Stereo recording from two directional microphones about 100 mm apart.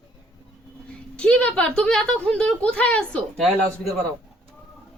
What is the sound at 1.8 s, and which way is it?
Speech, 10° left (ahead or behind).